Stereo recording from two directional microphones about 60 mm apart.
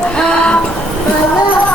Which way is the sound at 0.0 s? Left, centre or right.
Centre.